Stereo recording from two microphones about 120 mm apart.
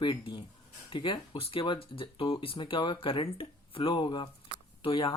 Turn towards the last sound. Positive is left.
turn(degrees=45)  # may be behind; listen again after turning